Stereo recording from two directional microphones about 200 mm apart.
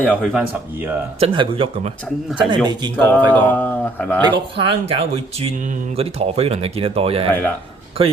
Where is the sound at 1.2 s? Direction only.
25° right (ahead or behind).